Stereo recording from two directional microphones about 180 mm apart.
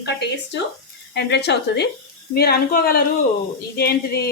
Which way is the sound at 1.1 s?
70° left (ahead or behind).